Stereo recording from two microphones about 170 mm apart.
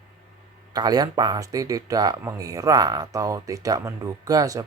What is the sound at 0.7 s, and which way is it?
Speech, 25° right (ahead or behind).